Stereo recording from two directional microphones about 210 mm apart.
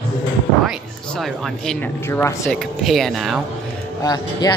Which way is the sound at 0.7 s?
Centre (ahead or behind).